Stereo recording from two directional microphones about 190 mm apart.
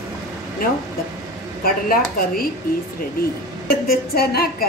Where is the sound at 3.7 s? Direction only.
55° left (ahead or behind).